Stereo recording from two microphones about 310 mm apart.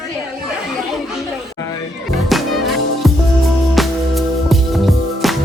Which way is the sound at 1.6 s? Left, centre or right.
Centre.